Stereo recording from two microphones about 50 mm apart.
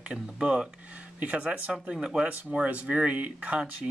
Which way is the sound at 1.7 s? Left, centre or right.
Centre.